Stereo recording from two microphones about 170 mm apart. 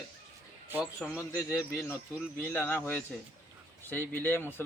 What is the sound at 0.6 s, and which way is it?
A man's voice, 10° right (ahead or behind).